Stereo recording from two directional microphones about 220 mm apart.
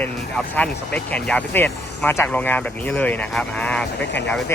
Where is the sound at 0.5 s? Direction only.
5° left (ahead or behind).